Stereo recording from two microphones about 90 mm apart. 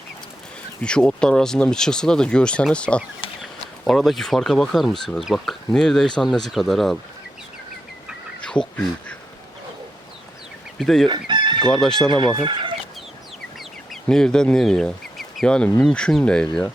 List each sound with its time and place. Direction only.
0.8 s speech: 10° left (ahead or behind)
3.8 s speech: centre (ahead or behind)
8.4 s speech: 10° left (ahead or behind)
10.8 s speech: 5° left (ahead or behind)
11.1 s chicken: 60° right (ahead or behind)
11.6 s speech: 5° left (ahead or behind)
12.4 s speech: 65° right (ahead or behind)
13.9 s speech: 5° left (ahead or behind)